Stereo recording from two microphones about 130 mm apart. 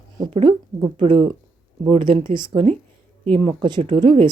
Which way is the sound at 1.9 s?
40° right (ahead or behind).